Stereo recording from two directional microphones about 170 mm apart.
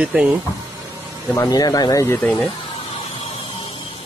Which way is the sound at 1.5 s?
25° left (ahead or behind).